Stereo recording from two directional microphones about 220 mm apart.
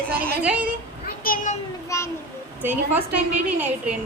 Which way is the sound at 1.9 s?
15° left (ahead or behind).